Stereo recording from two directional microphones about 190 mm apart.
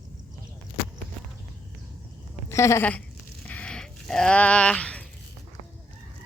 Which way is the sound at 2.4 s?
15° left (ahead or behind).